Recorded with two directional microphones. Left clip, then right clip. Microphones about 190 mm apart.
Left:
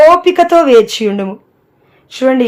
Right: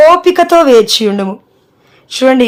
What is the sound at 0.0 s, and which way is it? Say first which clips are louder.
A woman's voice: even; 20° right (ahead or behind).